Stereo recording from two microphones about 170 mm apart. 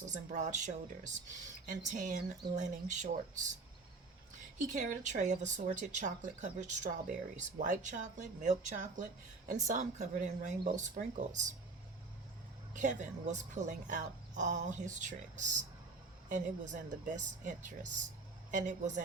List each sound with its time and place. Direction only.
0.1 s speech: 45° right (ahead or behind)
4.5 s speech: 50° right (ahead or behind)
12.7 s speech: 45° right (ahead or behind)